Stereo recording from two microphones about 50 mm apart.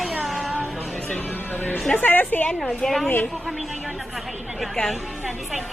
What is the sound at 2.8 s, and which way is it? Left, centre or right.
Speech, centre.